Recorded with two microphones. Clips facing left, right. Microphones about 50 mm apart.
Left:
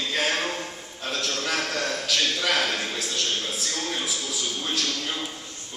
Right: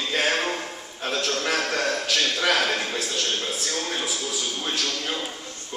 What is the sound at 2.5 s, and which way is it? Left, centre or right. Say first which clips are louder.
Speech: right 4 dB; centre.